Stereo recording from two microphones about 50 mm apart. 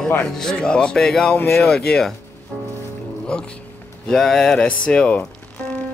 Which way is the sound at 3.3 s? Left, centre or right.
Centre.